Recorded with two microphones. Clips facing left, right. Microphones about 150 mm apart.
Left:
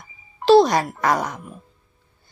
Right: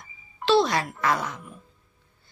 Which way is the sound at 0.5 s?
40° left (ahead or behind).